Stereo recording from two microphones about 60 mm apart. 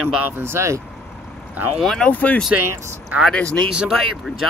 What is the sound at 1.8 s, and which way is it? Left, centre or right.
Speech, centre.